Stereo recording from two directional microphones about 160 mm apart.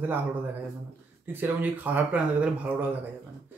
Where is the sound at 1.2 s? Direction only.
10° right (ahead or behind).